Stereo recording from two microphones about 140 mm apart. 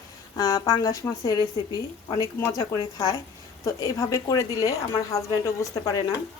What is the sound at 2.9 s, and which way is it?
Speech, 30° left (ahead or behind).